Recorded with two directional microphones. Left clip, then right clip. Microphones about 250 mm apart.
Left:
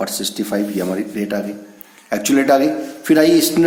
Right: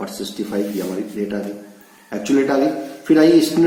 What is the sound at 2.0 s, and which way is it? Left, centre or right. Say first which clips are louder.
Speech: left 4 dB; left.